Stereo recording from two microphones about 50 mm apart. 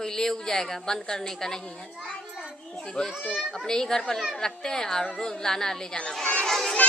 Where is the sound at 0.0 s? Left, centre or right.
Centre.